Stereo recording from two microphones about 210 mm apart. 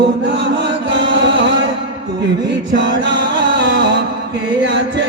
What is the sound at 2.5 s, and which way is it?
Music, 60° right (ahead or behind).